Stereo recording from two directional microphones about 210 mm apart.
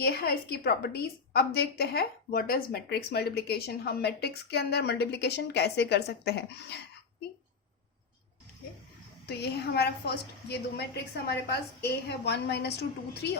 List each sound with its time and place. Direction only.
0.0 s speech: 45° left (ahead or behind)
9.2 s speech: 50° left (ahead or behind)